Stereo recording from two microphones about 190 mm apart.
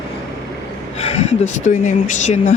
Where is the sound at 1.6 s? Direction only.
40° left (ahead or behind).